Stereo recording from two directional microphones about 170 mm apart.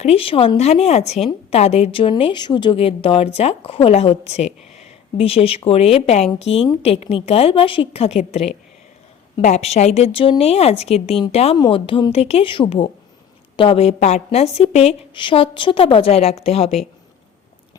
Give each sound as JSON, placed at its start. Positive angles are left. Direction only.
{"t": 0.0, "sound": "a woman's voice", "side_deg": 35}
{"t": 11.5, "sound": "a woman's voice", "side_deg": 25}